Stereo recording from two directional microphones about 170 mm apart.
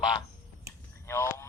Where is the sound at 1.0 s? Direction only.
15° left (ahead or behind).